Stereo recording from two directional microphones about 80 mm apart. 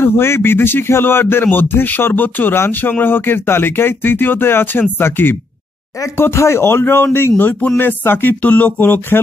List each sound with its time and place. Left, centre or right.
0.0 s speech: left